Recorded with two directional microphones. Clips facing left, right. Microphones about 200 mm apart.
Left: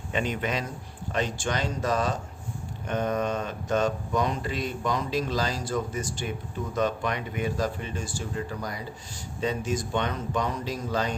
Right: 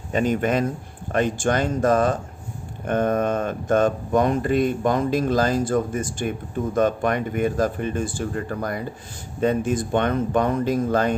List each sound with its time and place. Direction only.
0.1 s speech: 45° right (ahead or behind)